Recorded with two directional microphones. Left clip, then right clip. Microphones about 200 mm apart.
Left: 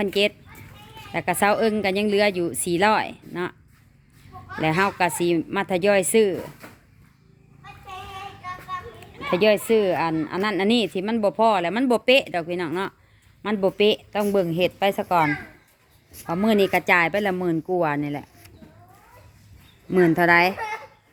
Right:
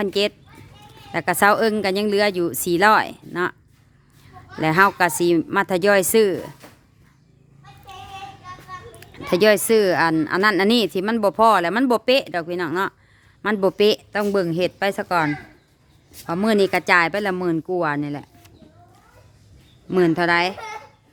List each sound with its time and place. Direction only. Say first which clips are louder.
0.0 s speech: even; 20° right (ahead or behind)
4.6 s speech: right 5 dB; 25° right (ahead or behind)
9.0 s speech: right 3 dB; 35° right (ahead or behind); by 18.3 s 10° right (ahead or behind)
19.9 s speech: left 1 dB; 10° right (ahead or behind)